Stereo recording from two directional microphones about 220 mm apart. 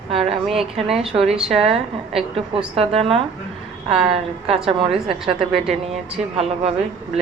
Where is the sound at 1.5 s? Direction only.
25° right (ahead or behind).